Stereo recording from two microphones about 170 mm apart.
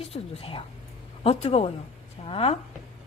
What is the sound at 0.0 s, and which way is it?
Mantra, 35° left (ahead or behind).